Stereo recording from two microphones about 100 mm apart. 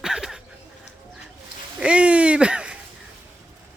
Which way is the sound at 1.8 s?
10° right (ahead or behind).